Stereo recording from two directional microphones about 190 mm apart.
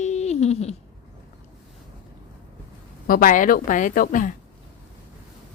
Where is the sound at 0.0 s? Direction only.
35° left (ahead or behind).